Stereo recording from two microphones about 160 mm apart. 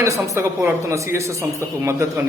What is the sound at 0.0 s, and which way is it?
A man's voice, 20° right (ahead or behind).